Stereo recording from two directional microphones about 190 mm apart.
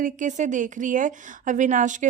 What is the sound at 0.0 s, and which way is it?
A woman's voice, 40° right (ahead or behind).